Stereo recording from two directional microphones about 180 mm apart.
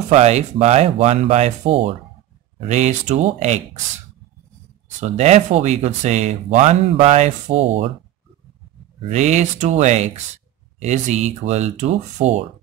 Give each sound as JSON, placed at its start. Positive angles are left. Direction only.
{"t": 0.1, "sound": "speech", "side_deg": -40}
{"t": 5.0, "sound": "speech", "side_deg": -40}
{"t": 9.1, "sound": "speech", "side_deg": -40}